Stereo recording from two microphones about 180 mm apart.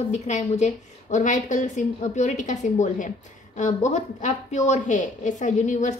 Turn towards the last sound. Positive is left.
turn(degrees=45)  # may be behind; listen again after turning